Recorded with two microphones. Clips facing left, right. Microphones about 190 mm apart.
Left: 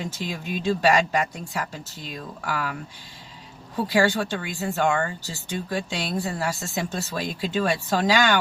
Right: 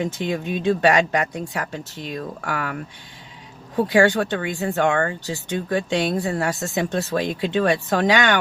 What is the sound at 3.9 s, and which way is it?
Speech, 60° right (ahead or behind).